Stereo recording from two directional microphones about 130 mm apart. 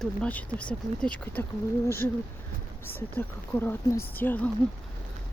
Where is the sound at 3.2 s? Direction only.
15° left (ahead or behind).